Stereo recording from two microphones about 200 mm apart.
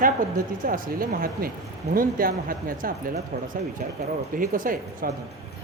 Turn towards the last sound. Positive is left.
turn(degrees=-45)  # may be behind; listen again after turning